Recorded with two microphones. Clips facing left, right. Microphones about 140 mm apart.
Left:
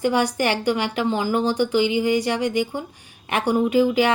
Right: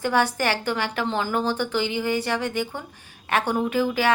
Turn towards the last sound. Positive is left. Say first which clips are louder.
# left 4 dB
turn(degrees=15)  # may be behind; listen again after turning